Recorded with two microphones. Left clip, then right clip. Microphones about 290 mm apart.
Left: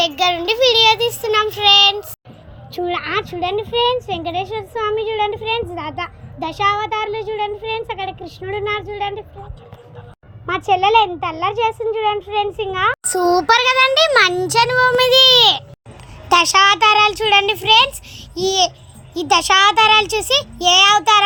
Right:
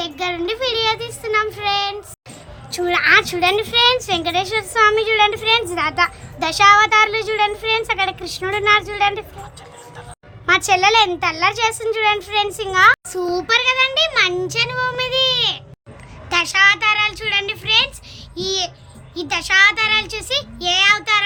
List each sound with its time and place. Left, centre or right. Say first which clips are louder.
0.0 s child singing: left 6 dB; centre
2.7 s speech: right 7 dB; centre
10.5 s speech: even; centre
13.1 s child singing: left 5 dB; centre